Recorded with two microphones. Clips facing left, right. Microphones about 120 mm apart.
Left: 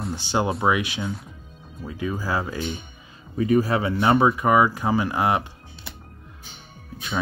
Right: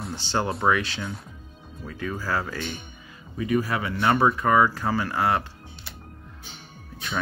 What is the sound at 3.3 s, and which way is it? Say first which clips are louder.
Speech: left 5 dB; 35° left (ahead or behind).